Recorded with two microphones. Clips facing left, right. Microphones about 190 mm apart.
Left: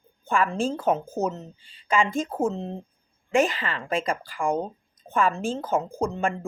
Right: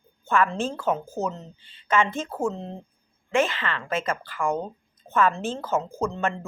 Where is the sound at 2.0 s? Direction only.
15° left (ahead or behind).